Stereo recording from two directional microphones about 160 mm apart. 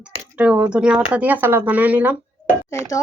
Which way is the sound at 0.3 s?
10° right (ahead or behind).